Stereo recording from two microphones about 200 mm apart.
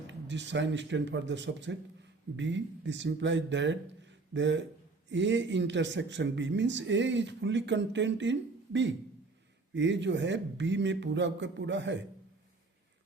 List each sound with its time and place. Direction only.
0.1 s speech: 65° right (ahead or behind)